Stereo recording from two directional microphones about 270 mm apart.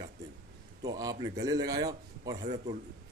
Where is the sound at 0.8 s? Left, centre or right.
Centre.